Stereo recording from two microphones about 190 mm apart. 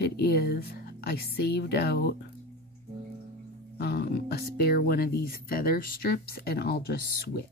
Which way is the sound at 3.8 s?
60° left (ahead or behind).